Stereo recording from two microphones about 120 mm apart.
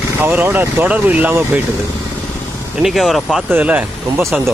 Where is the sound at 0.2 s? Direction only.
15° right (ahead or behind).